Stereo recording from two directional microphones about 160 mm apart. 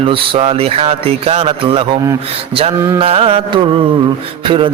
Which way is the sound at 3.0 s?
35° right (ahead or behind).